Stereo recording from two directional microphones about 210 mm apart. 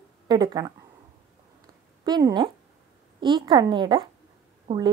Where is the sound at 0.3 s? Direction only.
20° right (ahead or behind).